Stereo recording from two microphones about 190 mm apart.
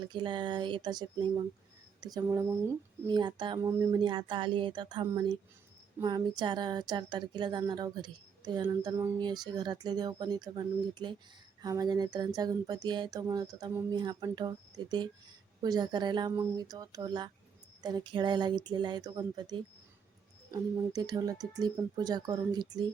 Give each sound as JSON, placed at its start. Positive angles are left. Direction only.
{"t": 0.0, "sound": "speech", "side_deg": -25}